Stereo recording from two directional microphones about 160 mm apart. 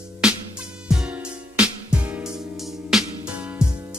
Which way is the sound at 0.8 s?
5° right (ahead or behind).